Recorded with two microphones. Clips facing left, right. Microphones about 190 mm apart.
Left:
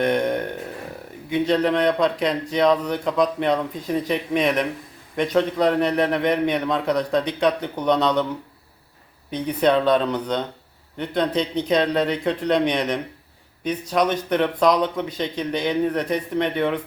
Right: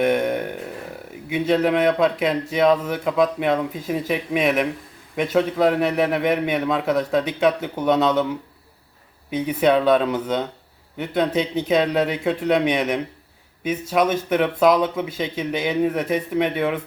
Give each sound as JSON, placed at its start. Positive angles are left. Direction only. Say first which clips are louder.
{"t": 0.0, "sound": "a sound", "louder": "right 1 dB", "side_deg": -5}
{"t": 1.3, "sound": "speech", "louder": "right 1 dB", "side_deg": -5}
{"t": 9.3, "sound": "speech", "louder": "right 1 dB", "side_deg": -5}